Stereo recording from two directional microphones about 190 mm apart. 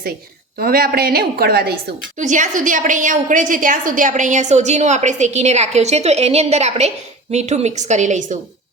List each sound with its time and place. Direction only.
0.6 s a woman's voice: 50° right (ahead or behind)
2.1 s a woman's voice: 40° right (ahead or behind)